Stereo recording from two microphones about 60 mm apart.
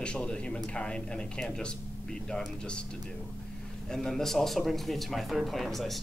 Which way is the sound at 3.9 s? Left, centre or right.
Centre.